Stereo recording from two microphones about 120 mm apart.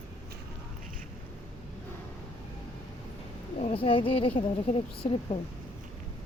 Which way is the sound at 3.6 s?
55° left (ahead or behind).